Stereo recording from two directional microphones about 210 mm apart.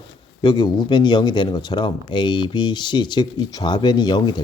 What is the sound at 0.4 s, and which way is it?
Speech, 20° left (ahead or behind).